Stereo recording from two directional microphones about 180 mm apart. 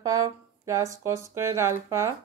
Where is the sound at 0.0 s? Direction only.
20° right (ahead or behind).